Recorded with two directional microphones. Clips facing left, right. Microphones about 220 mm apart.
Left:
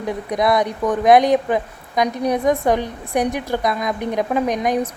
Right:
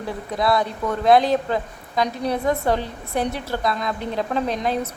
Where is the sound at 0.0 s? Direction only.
15° left (ahead or behind).